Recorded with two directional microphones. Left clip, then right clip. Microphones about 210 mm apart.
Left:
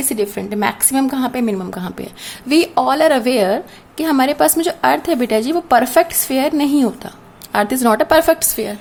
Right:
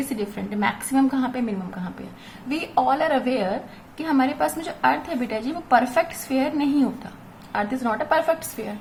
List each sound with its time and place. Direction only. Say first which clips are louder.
0.2 s a woman's voice: left 10 dB; 40° left (ahead or behind)